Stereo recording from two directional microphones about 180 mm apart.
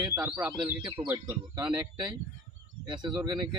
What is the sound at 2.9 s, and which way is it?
Speech, 25° right (ahead or behind).